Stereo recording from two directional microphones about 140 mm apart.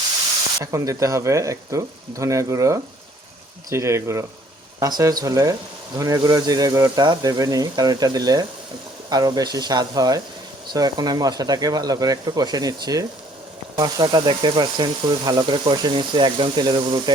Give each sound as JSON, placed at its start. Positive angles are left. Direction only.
{"t": 0.6, "sound": "speech", "side_deg": -20}